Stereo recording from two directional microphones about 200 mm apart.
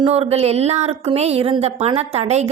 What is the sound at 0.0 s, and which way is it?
A woman's voice, 30° right (ahead or behind).